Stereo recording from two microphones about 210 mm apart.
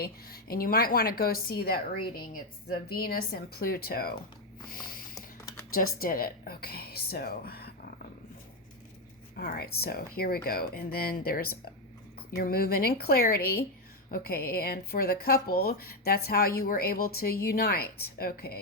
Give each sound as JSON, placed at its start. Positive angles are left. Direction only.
{"t": 0.0, "sound": "speech", "side_deg": 45}
{"t": 4.7, "sound": "snort", "side_deg": 45}
{"t": 5.7, "sound": "speech", "side_deg": 40}
{"t": 9.3, "sound": "speech", "side_deg": 45}